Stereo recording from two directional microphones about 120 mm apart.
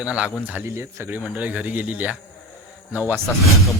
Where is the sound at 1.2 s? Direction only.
10° right (ahead or behind).